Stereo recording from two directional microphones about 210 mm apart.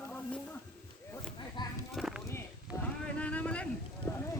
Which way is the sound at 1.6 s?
20° left (ahead or behind).